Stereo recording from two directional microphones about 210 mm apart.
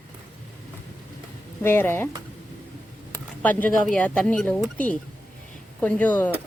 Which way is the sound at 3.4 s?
10° left (ahead or behind).